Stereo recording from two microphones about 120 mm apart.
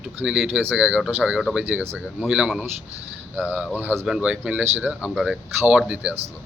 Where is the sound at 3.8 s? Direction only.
15° right (ahead or behind).